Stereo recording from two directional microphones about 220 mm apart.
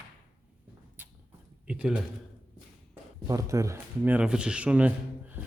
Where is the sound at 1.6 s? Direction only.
5° right (ahead or behind).